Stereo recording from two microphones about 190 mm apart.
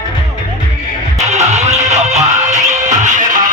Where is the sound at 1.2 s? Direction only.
35° right (ahead or behind).